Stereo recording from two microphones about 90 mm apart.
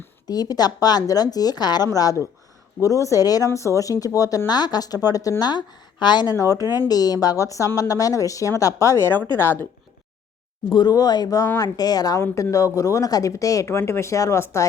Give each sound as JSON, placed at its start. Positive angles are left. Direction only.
{"t": 0.3, "sound": "a woman's voice", "side_deg": 45}
{"t": 5.4, "sound": "a woman's voice", "side_deg": 50}
{"t": 6.3, "sound": "a woman's voice", "side_deg": 40}
{"t": 10.7, "sound": "a woman's voice", "side_deg": 55}
{"t": 12.2, "sound": "speech", "side_deg": 35}